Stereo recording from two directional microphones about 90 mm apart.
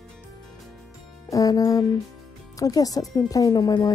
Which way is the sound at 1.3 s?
45° left (ahead or behind).